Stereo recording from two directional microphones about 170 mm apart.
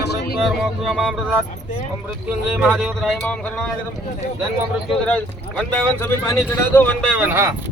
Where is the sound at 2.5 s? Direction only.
5° right (ahead or behind).